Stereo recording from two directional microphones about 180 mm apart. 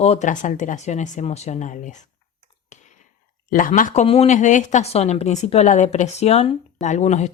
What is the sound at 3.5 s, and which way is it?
A woman's voice, 50° left (ahead or behind).